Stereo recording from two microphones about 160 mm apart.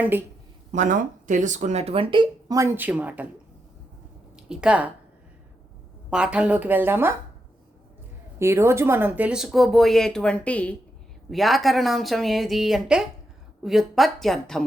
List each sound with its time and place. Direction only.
0.0 s speech: 10° right (ahead or behind)
0.7 s speech: 50° right (ahead or behind); by 2.6 s 30° right (ahead or behind)
2.6 s speech: 15° right (ahead or behind)
4.4 s speech: 5° right (ahead or behind)
6.1 s speech: 5° right (ahead or behind)
8.4 s speech: 15° right (ahead or behind); by 14.6 s centre (ahead or behind)